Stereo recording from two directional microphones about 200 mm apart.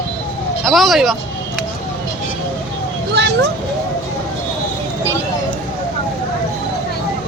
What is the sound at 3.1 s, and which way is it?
Speech, 60° right (ahead or behind).